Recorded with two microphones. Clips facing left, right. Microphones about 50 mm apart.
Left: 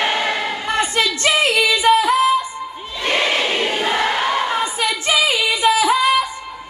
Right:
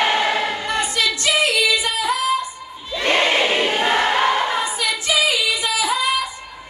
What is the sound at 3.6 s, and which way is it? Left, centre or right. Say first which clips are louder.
Choir: right 1 dB; right.